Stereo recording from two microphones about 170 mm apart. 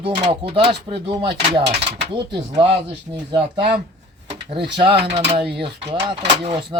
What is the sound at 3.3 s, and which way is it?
Speech, 30° right (ahead or behind).